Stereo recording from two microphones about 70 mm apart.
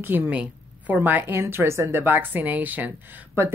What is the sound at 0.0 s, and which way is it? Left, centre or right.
A woman's voice, right.